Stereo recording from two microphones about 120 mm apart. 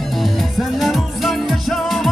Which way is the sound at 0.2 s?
Centre (ahead or behind).